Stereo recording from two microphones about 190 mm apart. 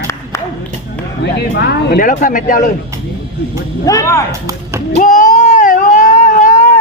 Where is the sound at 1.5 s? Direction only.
65° left (ahead or behind).